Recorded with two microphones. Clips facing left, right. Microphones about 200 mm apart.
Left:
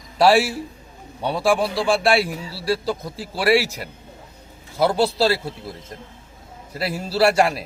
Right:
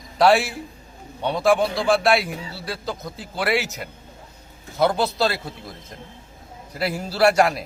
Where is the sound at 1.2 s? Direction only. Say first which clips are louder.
Right 1 dB; 30° left (ahead or behind).